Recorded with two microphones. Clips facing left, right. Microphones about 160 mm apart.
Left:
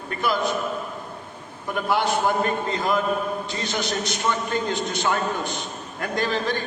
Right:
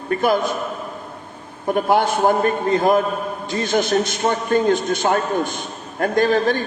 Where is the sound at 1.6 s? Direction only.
50° right (ahead or behind).